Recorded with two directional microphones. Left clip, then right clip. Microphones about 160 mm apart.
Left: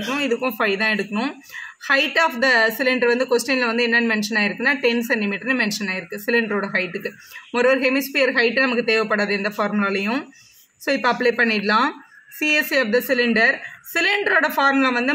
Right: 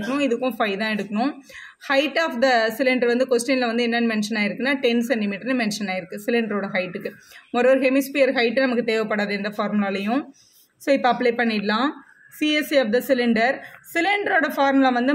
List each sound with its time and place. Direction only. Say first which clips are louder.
0.1 s speech: even; 30° left (ahead or behind)